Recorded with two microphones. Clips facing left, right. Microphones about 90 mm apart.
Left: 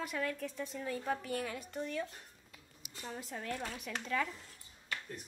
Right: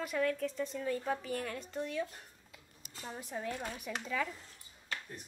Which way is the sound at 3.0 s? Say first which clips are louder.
Right 2 dB; 10° right (ahead or behind).